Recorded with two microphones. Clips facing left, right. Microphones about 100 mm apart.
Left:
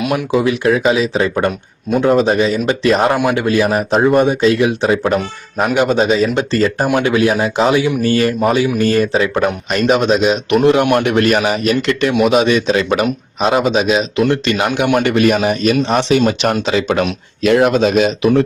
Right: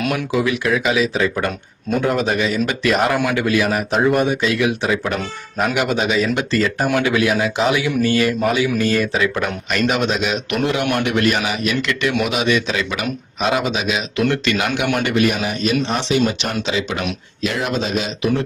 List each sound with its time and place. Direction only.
0.1 s speech: 30° left (ahead or behind)
10.9 s speech: 40° left (ahead or behind); by 18.4 s 60° left (ahead or behind)